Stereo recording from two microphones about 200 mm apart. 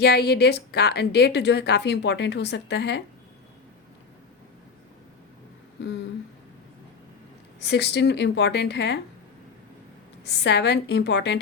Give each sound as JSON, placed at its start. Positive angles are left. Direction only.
{"t": 0.0, "sound": "a woman's voice", "side_deg": 55}
{"t": 7.6, "sound": "a woman's voice", "side_deg": 60}
{"t": 10.2, "sound": "a woman's voice", "side_deg": 60}